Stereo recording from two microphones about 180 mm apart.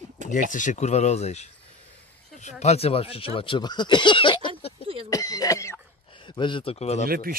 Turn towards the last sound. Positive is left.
turn(degrees=-55)  # may be behind; listen again after turning